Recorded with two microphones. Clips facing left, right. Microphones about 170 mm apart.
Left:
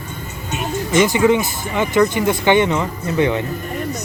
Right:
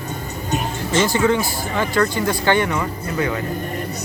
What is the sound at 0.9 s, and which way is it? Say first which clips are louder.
Speech: left 3 dB; 15° left (ahead or behind).